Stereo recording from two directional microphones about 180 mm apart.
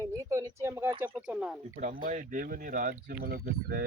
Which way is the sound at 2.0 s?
45° right (ahead or behind).